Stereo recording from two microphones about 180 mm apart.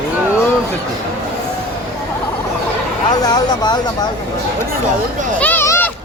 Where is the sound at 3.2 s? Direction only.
20° left (ahead or behind).